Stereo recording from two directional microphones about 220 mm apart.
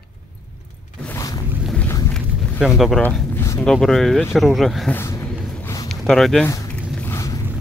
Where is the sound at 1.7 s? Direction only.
5° left (ahead or behind).